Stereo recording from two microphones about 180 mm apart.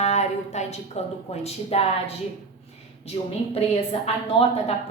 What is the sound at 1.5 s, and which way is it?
Speech, 35° left (ahead or behind).